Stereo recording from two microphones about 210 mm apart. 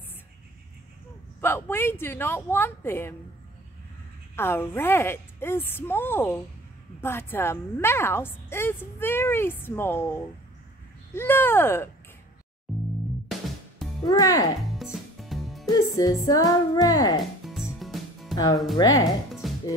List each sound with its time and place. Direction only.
1.4 s a woman's voice: 10° left (ahead or behind)
4.4 s a woman's voice: 10° left (ahead or behind)
11.1 s a woman's voice: 10° left (ahead or behind)
12.7 s music: centre (ahead or behind)
14.0 s a woman's voice: 15° left (ahead or behind)
14.7 s music: centre (ahead or behind)
15.7 s a woman's voice: 20° left (ahead or behind)
17.5 s music: centre (ahead or behind)
18.3 s a woman's voice: 15° left (ahead or behind)
19.4 s music: centre (ahead or behind)